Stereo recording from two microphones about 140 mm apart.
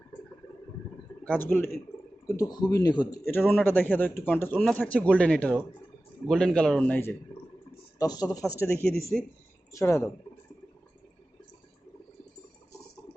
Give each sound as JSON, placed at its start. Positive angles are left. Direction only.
{"t": 1.2, "sound": "a man's voice", "side_deg": 10}
{"t": 3.2, "sound": "a man's voice", "side_deg": 15}
{"t": 7.9, "sound": "speech", "side_deg": 25}
{"t": 9.1, "sound": "a man's voice", "side_deg": 5}
{"t": 9.7, "sound": "speech", "side_deg": 20}